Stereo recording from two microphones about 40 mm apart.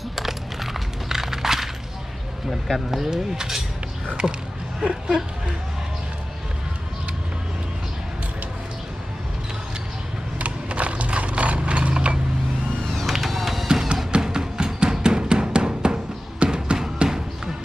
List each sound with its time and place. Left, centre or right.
0.2 s a sound: centre
2.6 s speech: centre
4.1 s speech: right
10.3 s mechanisms: right
12.9 s a sound: centre
13.7 s music: centre